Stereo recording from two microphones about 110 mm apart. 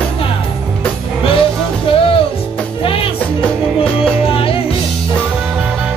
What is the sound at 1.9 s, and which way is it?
Music, 55° left (ahead or behind).